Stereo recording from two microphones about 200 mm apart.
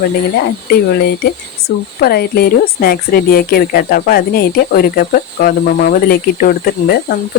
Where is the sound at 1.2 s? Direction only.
50° left (ahead or behind).